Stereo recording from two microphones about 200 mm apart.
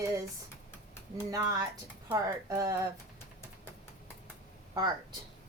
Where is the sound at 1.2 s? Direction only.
15° right (ahead or behind).